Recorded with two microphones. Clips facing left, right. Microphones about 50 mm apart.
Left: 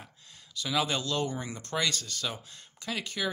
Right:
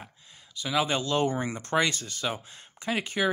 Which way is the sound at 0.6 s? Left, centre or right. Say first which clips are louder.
Right 3 dB; centre.